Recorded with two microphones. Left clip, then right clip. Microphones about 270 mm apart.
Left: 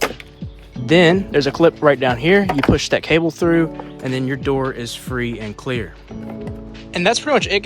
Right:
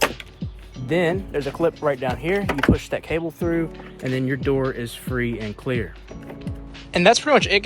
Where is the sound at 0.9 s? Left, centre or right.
Left.